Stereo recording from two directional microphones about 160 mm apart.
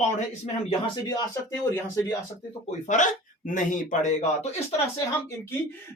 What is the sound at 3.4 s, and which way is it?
Speech, 55° left (ahead or behind).